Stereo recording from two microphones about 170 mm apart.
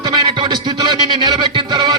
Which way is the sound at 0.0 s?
25° right (ahead or behind).